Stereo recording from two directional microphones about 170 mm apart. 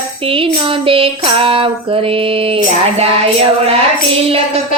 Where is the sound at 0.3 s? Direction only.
30° right (ahead or behind).